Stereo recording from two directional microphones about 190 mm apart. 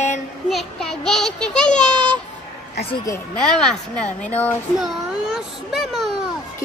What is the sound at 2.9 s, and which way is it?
Speech, 15° left (ahead or behind).